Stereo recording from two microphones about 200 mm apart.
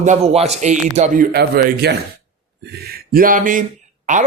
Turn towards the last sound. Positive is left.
turn(degrees=-40)  # may be behind; listen again after turning